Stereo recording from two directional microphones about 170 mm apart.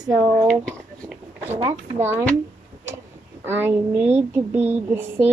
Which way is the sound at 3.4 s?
10° right (ahead or behind).